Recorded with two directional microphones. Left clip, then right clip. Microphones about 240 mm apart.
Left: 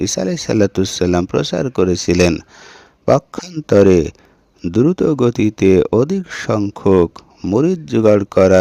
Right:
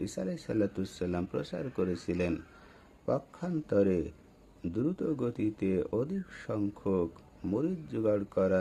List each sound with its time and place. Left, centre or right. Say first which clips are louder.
0.0 s speech: left 18 dB; left